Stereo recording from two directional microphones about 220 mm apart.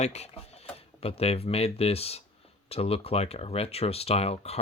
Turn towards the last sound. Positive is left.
turn(degrees=30)  # may be behind; listen again after turning